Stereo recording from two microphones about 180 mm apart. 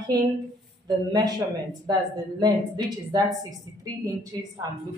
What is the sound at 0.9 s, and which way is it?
A woman's voice, 20° right (ahead or behind).